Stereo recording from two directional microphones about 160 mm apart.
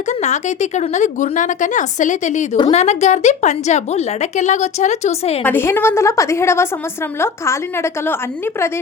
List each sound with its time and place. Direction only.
0.1 s a woman's voice: 45° left (ahead or behind)
2.6 s a woman's voice: 40° left (ahead or behind)
5.4 s a woman's voice: 10° left (ahead or behind)